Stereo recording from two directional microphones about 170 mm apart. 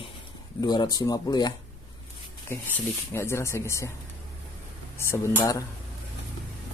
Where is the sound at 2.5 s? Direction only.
10° left (ahead or behind).